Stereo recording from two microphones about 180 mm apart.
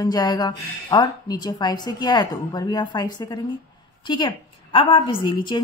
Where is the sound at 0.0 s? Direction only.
20° left (ahead or behind).